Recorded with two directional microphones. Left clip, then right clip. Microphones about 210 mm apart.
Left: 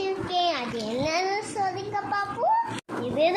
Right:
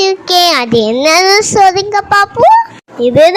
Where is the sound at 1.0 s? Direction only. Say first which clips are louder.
Right 18 dB; 50° right (ahead or behind).